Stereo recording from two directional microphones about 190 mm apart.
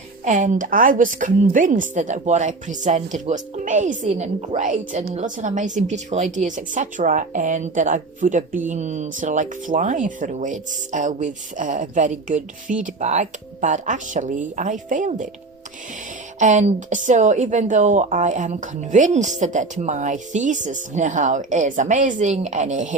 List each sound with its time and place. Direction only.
0.3 s a woman's voice: 40° right (ahead or behind)
16.4 s a woman's voice: 40° right (ahead or behind)